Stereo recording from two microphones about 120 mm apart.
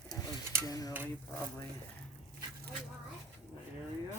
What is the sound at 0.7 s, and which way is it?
Cutlery, 30° left (ahead or behind).